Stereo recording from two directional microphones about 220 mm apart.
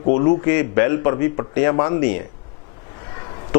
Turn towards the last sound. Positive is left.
turn(degrees=20)  # may be behind; listen again after turning